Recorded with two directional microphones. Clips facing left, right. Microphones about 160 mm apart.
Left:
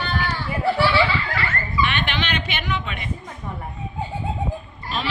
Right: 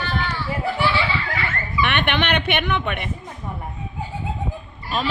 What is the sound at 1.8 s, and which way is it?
Speech, 60° right (ahead or behind).